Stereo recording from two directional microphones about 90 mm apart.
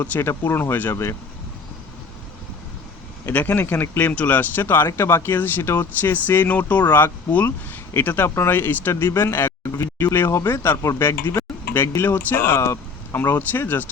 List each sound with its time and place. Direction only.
0.0 s speech: 25° left (ahead or behind)
3.2 s speech: 20° left (ahead or behind)
13.1 s speech: 20° left (ahead or behind)